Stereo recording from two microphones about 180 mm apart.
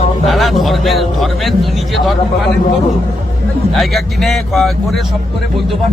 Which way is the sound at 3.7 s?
Centre (ahead or behind).